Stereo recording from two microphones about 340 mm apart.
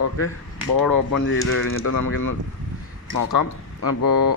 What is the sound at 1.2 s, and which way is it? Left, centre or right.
A man's voice, left.